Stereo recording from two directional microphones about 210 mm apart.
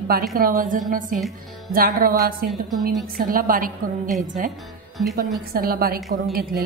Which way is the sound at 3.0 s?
40° right (ahead or behind).